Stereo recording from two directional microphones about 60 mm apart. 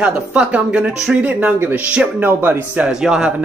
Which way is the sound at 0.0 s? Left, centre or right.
Right.